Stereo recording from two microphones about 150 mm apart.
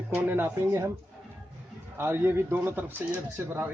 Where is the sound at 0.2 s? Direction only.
15° right (ahead or behind).